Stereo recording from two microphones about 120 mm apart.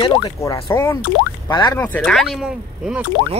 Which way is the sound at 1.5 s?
40° left (ahead or behind).